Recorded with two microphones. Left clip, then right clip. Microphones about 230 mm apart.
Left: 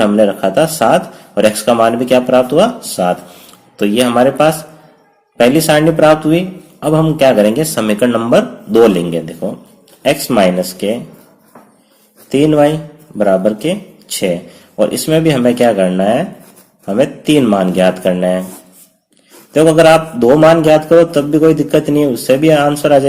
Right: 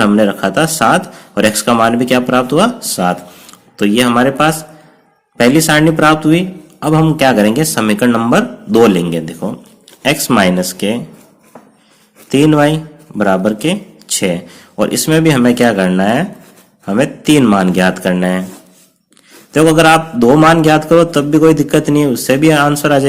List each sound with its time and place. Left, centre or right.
0.0 s speech: right
12.3 s speech: right
19.5 s speech: right